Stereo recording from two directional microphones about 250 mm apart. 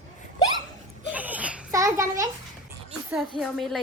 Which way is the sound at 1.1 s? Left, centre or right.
Centre.